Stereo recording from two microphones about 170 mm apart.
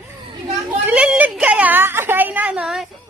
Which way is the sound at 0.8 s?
5° right (ahead or behind).